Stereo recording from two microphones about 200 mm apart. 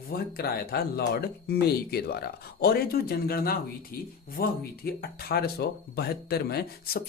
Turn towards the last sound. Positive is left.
turn(degrees=50)  # may be behind; listen again after turning